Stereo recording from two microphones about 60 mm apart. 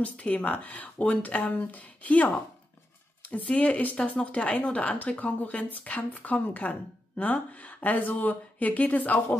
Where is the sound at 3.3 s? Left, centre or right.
Left.